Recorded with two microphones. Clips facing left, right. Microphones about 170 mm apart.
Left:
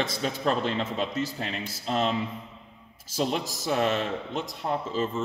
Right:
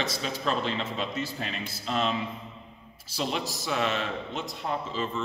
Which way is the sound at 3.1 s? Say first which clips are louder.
Left 3 dB; 45° left (ahead or behind).